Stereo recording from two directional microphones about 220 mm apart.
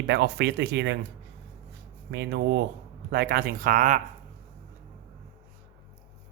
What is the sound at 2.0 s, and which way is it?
Speech, 50° right (ahead or behind).